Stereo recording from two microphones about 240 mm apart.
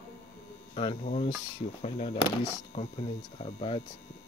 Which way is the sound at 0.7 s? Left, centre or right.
Left.